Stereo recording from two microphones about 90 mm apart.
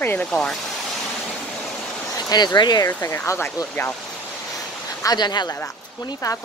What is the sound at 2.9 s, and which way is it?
Speech, 30° left (ahead or behind).